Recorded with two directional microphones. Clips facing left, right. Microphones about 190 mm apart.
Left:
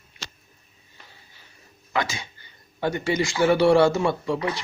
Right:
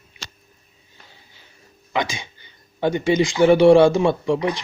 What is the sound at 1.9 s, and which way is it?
Speech, 15° right (ahead or behind).